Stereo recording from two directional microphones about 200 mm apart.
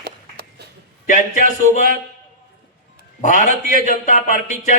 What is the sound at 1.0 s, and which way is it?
Speech, 40° left (ahead or behind).